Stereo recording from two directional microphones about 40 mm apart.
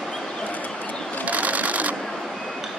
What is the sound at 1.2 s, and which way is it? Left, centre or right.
Sewing machine, right.